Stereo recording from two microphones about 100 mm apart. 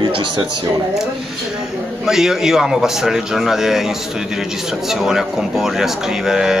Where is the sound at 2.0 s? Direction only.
5° right (ahead or behind).